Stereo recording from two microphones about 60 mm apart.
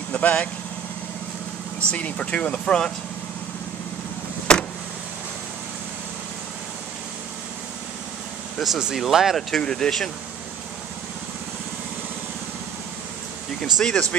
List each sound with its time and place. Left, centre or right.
0.1 s speech: left
1.9 s speech: centre
4.5 s vehicle: centre
8.5 s speech: centre
9.6 s speech: centre
13.7 s speech: centre